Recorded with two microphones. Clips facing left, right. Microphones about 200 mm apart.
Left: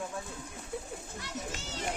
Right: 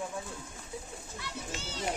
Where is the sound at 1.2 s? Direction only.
45° left (ahead or behind).